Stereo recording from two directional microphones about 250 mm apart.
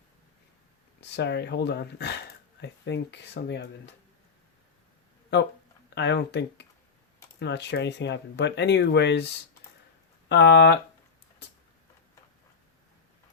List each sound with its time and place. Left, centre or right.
1.0 s speech: left
5.3 s speech: left